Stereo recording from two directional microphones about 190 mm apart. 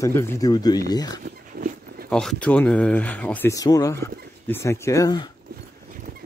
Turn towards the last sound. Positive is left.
turn(degrees=20)  # may be behind; listen again after turning